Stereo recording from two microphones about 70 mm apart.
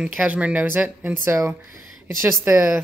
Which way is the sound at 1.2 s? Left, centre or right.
Right.